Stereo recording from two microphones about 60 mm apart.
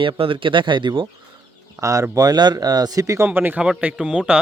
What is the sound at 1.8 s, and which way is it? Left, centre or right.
Speech, right.